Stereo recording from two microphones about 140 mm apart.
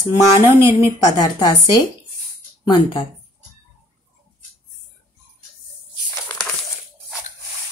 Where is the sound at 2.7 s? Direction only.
35° left (ahead or behind).